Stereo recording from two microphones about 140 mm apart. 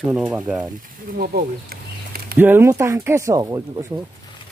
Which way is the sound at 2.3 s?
15° right (ahead or behind).